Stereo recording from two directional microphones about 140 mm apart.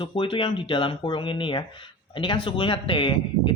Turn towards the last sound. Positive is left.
turn(degrees=35)  # may be behind; listen again after turning